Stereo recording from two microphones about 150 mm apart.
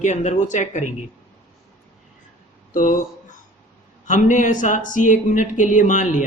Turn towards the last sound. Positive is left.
turn(degrees=55)  # may be behind; listen again after turning